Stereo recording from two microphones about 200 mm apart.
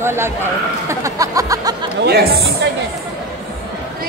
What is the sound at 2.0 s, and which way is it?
Speech, 55° right (ahead or behind).